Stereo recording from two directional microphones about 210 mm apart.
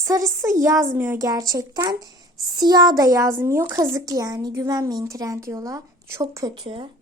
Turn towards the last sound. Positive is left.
turn(degrees=-25)  # may be behind; listen again after turning